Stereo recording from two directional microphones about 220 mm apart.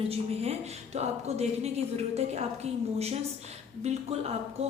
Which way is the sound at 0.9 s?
30° right (ahead or behind).